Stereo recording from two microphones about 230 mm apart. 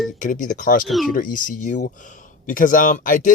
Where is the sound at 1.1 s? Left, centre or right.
Left.